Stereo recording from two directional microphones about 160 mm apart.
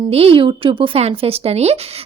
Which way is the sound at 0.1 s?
35° right (ahead or behind).